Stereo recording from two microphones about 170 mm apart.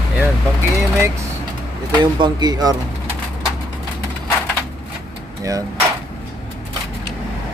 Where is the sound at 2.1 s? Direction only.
25° right (ahead or behind).